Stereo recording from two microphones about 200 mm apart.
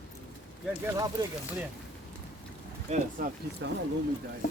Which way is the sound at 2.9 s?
35° right (ahead or behind).